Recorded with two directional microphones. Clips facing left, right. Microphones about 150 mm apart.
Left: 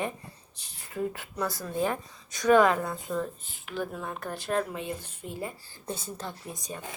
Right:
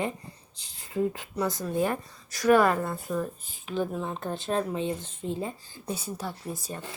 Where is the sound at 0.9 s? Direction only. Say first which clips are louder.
Right 4 dB; 10° right (ahead or behind).